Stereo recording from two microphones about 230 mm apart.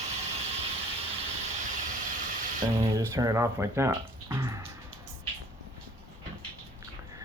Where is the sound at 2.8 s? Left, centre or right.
Centre.